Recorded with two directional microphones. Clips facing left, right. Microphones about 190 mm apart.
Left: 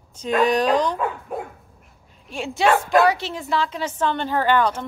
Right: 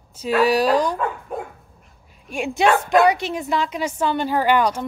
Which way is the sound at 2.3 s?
15° right (ahead or behind).